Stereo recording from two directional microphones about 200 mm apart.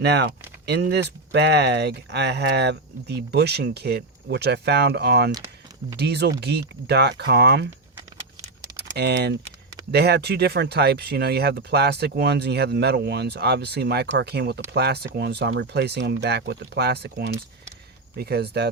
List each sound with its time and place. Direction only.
0.0 s speech: 55° right (ahead or behind)
7.9 s a sound: 15° right (ahead or behind)
8.8 s speech: 55° right (ahead or behind)